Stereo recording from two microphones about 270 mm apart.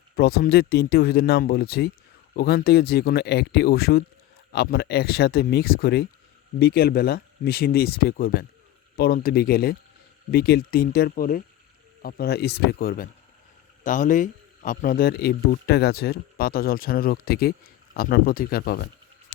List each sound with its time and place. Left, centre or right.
0.2 s speech: left